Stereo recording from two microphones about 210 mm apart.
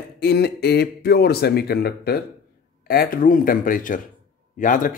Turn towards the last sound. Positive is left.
turn(degrees=40)  # may be behind; listen again after turning